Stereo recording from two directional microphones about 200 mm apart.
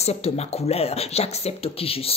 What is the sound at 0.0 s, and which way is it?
Speech, 30° left (ahead or behind).